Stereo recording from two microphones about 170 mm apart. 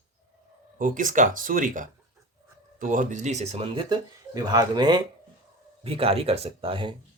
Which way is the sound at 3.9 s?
20° right (ahead or behind).